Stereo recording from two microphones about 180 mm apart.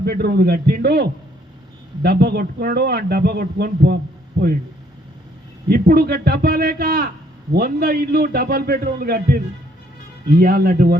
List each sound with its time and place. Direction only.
0.0 s a man's voice: 60° right (ahead or behind)
5.6 s a man's voice: 55° right (ahead or behind)